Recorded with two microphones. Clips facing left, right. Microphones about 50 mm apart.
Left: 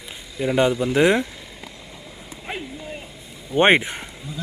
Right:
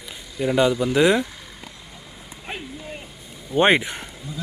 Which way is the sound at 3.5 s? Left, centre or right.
Left.